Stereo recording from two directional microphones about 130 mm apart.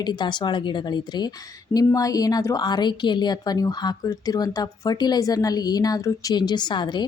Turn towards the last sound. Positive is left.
turn(degrees=35)  # may be behind; listen again after turning